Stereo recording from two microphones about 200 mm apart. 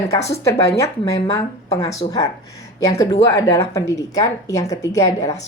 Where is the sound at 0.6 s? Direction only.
15° left (ahead or behind).